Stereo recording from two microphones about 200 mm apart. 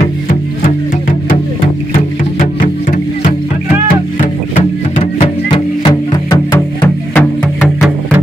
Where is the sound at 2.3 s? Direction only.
45° left (ahead or behind).